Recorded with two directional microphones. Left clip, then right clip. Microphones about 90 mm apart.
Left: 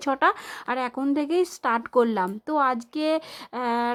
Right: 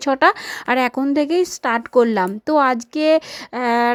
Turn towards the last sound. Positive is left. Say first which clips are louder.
# right 8 dB
turn(degrees=-45)  # may be behind; listen again after turning